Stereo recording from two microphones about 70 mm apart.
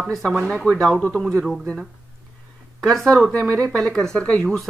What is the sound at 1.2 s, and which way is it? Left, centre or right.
Speech, centre.